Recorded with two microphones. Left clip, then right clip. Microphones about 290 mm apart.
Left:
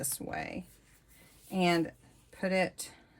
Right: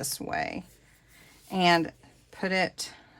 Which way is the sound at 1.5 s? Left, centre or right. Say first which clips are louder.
Right 6 dB; right.